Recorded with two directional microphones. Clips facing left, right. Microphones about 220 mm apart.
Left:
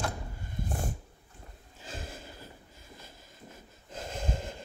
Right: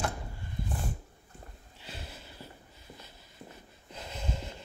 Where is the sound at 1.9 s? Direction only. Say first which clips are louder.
Left 4 dB; 50° left (ahead or behind).